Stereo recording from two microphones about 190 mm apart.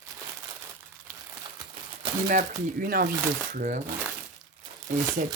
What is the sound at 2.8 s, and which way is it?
Speech, 50° right (ahead or behind).